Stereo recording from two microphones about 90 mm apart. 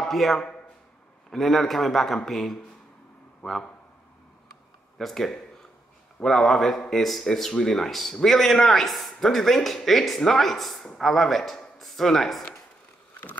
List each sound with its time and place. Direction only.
0.0 s speech: centre (ahead or behind)
4.9 s speech: 5° left (ahead or behind)
13.1 s a sound: 20° left (ahead or behind)